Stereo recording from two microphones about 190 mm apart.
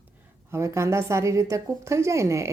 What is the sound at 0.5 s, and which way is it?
A woman's voice, 15° right (ahead or behind).